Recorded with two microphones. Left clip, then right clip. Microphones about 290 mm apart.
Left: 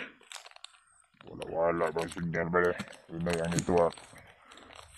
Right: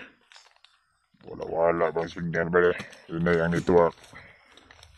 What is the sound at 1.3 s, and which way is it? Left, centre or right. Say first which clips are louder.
Speech: right 6 dB; centre.